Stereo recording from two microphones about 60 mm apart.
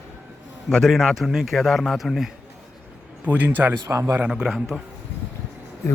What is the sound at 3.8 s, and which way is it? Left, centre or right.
Speech, right.